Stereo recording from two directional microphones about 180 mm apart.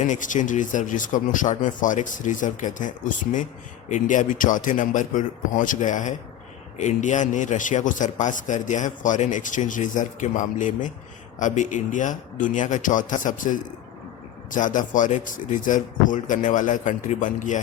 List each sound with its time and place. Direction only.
0.0 s a man's voice: 45° left (ahead or behind)